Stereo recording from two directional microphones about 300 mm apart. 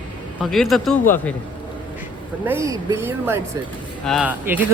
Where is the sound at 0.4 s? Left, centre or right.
Centre.